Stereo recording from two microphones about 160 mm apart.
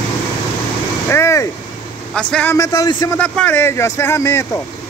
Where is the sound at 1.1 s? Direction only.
20° left (ahead or behind).